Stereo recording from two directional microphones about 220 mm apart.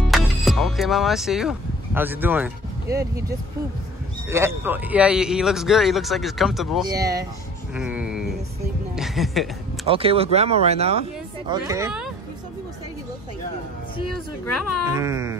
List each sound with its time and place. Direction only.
0.1 s speech: centre (ahead or behind)
6.9 s speech: 15° right (ahead or behind)
7.7 s a sound: 5° right (ahead or behind)
8.9 s speech: centre (ahead or behind)
9.8 s speech: 25° right (ahead or behind)
15.0 s speech: 15° right (ahead or behind)